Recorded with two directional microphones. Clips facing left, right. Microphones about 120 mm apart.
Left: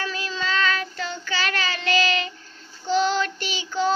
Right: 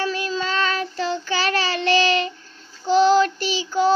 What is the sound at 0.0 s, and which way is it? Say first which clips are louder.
Child singing: right 5 dB; 40° right (ahead or behind).